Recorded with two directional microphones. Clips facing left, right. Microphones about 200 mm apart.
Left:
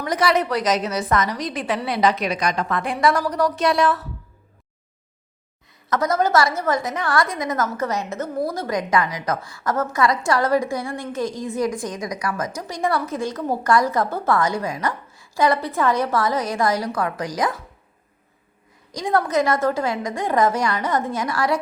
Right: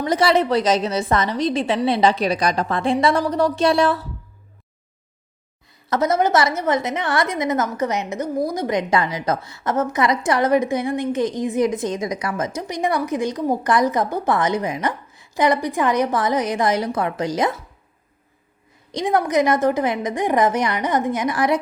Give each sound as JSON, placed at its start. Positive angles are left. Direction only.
{"t": 0.0, "sound": "a woman's voice", "side_deg": -30}
{"t": 5.9, "sound": "a woman's voice", "side_deg": -25}
{"t": 18.9, "sound": "a woman's voice", "side_deg": -20}